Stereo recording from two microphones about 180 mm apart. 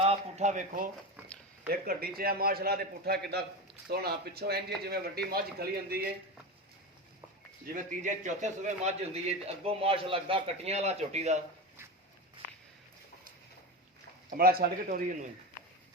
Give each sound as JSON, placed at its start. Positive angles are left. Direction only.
{"t": 0.0, "sound": "a sound", "side_deg": -35}
{"t": 1.6, "sound": "a man's voice", "side_deg": -55}
{"t": 7.8, "sound": "a man's voice", "side_deg": -45}
{"t": 14.3, "sound": "a man's voice", "side_deg": -55}